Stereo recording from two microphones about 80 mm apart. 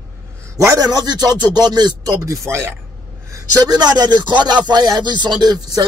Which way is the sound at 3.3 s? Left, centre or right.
Right.